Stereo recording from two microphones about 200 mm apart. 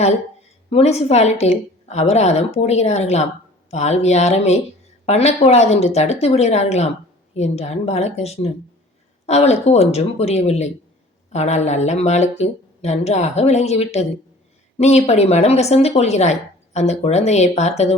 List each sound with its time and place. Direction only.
0.7 s speech: 30° left (ahead or behind)